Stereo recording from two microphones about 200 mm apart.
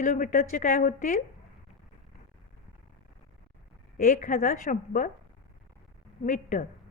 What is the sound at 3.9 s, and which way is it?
A woman's voice, 45° left (ahead or behind).